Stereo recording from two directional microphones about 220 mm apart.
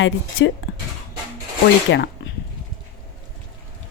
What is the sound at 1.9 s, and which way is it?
Zipper, 55° left (ahead or behind).